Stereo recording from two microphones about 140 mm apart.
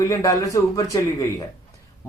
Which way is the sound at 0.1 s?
25° left (ahead or behind).